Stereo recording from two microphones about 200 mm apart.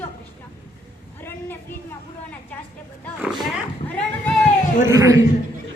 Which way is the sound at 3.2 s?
Centre (ahead or behind).